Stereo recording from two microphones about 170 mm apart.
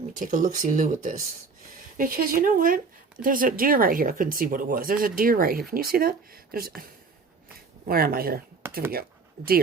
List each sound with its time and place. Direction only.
0.2 s speech: 50° right (ahead or behind)
7.9 s speech: 60° right (ahead or behind)
8.6 s a sound: 15° right (ahead or behind)
9.4 s speech: 60° right (ahead or behind)